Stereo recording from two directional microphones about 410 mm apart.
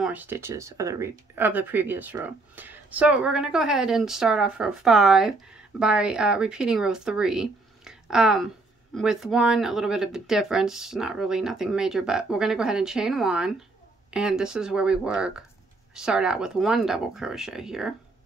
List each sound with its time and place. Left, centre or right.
0.0 s speech: centre